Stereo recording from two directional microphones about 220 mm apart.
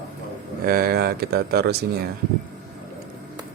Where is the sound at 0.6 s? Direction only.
40° right (ahead or behind).